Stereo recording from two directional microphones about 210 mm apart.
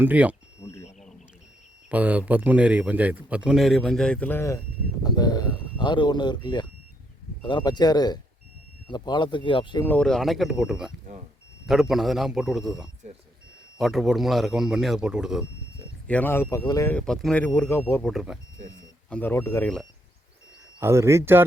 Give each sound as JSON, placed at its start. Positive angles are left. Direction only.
{"t": 0.0, "sound": "speech", "side_deg": -5}
{"t": 0.6, "sound": "smoke detector", "side_deg": 15}
{"t": 1.9, "sound": "speech", "side_deg": -5}
{"t": 9.8, "sound": "speech", "side_deg": 5}
{"t": 16.0, "sound": "speech", "side_deg": 10}
{"t": 17.0, "sound": "speech", "side_deg": 5}
{"t": 18.1, "sound": "speech", "side_deg": -5}
{"t": 19.1, "sound": "speech", "side_deg": 10}
{"t": 20.7, "sound": "speech", "side_deg": -10}